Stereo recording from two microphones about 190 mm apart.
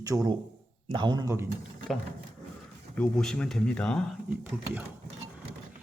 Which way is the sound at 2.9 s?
5° left (ahead or behind).